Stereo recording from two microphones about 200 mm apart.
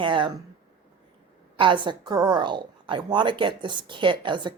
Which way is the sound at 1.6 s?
25° right (ahead or behind).